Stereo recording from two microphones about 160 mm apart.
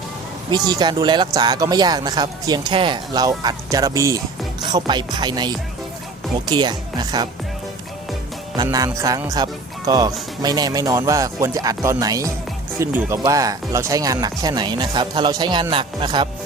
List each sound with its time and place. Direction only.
0.5 s speech: 25° right (ahead or behind)
8.5 s speech: 20° right (ahead or behind)